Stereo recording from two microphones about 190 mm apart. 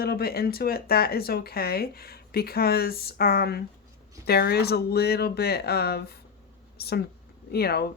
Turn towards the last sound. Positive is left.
turn(degrees=60)  # may be behind; listen again after turning